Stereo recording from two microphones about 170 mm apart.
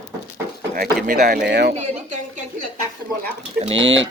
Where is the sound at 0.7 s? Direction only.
65° right (ahead or behind).